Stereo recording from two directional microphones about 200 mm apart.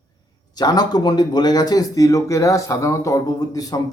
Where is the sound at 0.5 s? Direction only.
20° left (ahead or behind).